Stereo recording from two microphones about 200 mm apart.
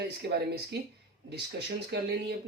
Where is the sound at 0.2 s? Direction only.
50° right (ahead or behind).